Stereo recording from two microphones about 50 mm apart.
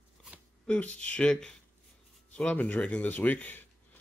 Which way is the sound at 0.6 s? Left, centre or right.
Left.